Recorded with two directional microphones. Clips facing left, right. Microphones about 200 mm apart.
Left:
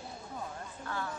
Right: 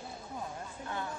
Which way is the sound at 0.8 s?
20° right (ahead or behind).